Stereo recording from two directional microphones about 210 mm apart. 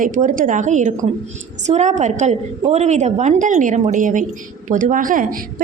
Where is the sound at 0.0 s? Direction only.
40° right (ahead or behind).